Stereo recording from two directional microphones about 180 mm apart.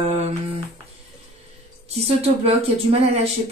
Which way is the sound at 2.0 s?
35° right (ahead or behind).